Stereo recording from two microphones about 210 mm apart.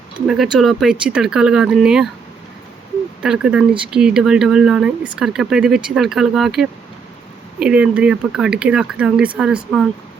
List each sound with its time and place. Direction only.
0.3 s speech: centre (ahead or behind)
3.2 s speech: 5° right (ahead or behind)